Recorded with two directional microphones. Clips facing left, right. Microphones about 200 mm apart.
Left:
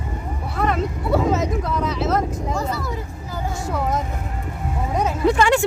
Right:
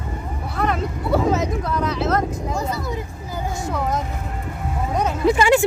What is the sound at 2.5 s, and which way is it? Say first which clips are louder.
Speech: right 1 dB; 15° right (ahead or behind).